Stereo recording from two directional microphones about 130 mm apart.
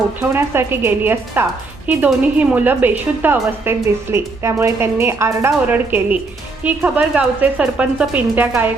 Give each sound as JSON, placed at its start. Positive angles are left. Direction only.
{"t": 0.2, "sound": "a woman's voice", "side_deg": -20}